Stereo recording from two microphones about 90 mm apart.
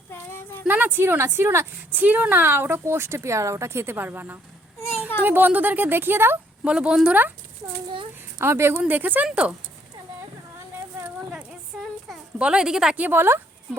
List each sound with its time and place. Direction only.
0.1 s a sound: 25° left (ahead or behind)
0.7 s a woman's voice: 20° right (ahead or behind)
4.8 s a sound: 25° left (ahead or behind)
5.2 s a woman's voice: 20° right (ahead or behind)
6.7 s speech: 10° right (ahead or behind)
8.4 s a woman's voice: 30° right (ahead or behind); by 9.6 s 15° right (ahead or behind)
12.4 s speech: 10° right (ahead or behind)
13.0 s a woman's voice: 25° right (ahead or behind)